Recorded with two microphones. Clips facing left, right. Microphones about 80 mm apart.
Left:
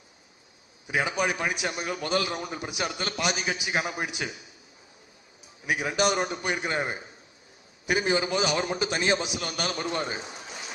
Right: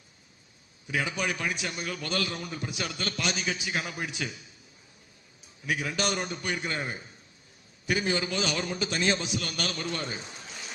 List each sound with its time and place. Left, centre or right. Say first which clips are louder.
0.9 s a man's voice: left 4 dB; centre
5.6 s a man's voice: left 5 dB; centre